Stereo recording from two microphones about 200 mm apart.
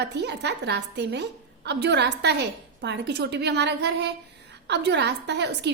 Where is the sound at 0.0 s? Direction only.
60° right (ahead or behind).